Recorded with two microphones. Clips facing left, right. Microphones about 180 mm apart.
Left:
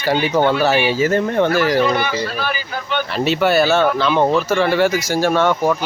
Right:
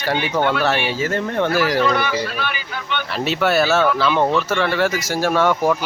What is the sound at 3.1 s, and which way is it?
Speech, centre (ahead or behind).